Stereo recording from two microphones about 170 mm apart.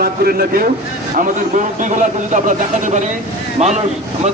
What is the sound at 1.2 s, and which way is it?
A man's voice, 50° right (ahead or behind).